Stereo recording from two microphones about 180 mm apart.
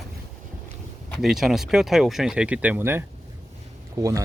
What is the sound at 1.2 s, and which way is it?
Speech, centre (ahead or behind).